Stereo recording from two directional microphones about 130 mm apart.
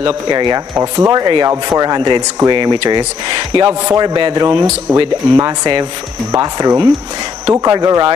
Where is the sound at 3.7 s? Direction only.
25° right (ahead or behind).